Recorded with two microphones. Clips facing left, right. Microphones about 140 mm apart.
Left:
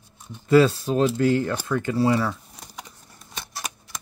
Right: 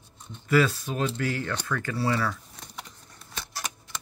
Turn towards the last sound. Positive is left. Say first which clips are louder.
# left 1 dB
turn(degrees=15)  # may be behind; listen again after turning